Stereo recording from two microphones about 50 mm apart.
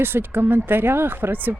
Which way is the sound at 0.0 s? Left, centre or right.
Right.